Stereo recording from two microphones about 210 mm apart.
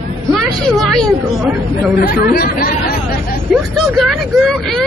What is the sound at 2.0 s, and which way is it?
Speech, 45° left (ahead or behind).